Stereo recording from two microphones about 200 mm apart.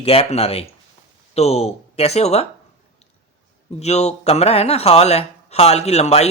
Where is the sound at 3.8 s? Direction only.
35° left (ahead or behind).